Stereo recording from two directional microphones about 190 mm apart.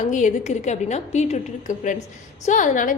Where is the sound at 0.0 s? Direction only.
40° left (ahead or behind).